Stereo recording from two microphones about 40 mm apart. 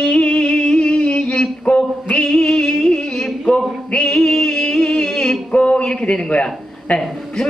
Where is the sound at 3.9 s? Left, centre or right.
Left.